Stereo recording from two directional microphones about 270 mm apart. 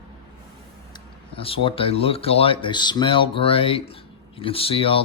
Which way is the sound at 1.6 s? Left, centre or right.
Left.